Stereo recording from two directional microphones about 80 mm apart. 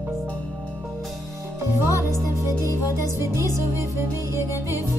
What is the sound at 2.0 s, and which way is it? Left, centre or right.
Music, right.